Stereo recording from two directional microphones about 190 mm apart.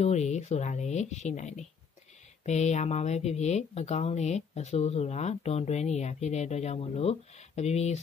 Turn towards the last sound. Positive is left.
turn(degrees=35)  # may be behind; listen again after turning